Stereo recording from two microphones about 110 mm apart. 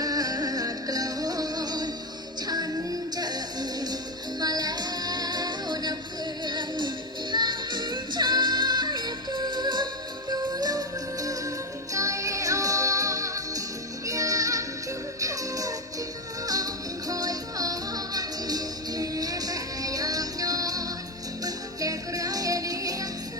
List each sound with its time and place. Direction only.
0.0 s music: 35° right (ahead or behind)
17.1 s music: 35° right (ahead or behind)